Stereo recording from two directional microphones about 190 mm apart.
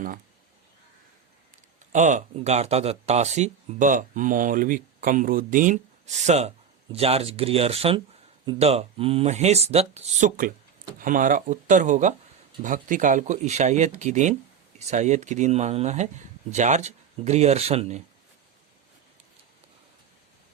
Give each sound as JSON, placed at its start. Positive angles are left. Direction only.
{"t": 1.9, "sound": "speech", "side_deg": -40}